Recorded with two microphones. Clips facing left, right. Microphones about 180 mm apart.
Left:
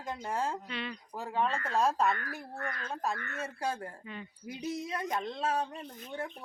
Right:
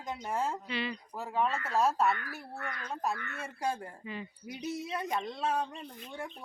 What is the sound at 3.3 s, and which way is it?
Speech, 10° right (ahead or behind).